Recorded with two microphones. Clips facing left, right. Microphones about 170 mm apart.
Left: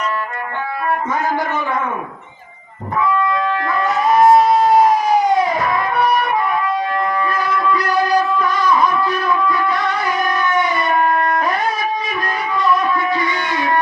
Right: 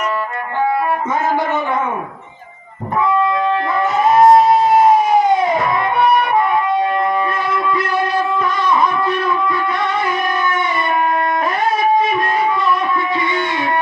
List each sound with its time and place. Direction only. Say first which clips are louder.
4.0 s music: right 2 dB; 25° right (ahead or behind)
6.0 s music: right 4 dB; 25° right (ahead or behind)
8.6 s shofar: even; 25° right (ahead or behind)
12.0 s a sound: right 6 dB; 25° right (ahead or behind)